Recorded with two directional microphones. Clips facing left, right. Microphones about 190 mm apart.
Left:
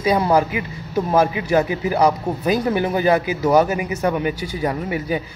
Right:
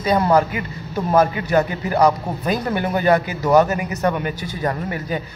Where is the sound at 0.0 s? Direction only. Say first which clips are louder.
Even; 10° left (ahead or behind).